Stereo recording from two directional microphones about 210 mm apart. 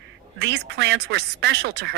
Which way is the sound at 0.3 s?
55° right (ahead or behind).